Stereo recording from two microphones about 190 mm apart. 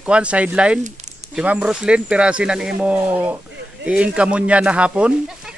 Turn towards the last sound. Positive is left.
turn(degrees=-5)  # may be behind; listen again after turning